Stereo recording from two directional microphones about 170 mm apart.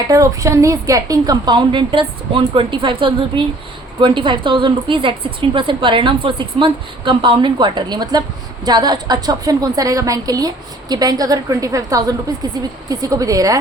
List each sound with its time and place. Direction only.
0.1 s a woman's voice: 20° right (ahead or behind)